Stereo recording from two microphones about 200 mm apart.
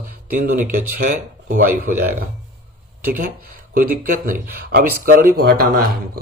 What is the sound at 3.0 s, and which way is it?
Speech, 45° right (ahead or behind).